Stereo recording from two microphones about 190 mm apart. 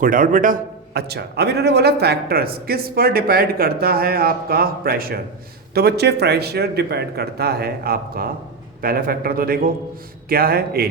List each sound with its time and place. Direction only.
0.0 s a man's voice: 45° right (ahead or behind)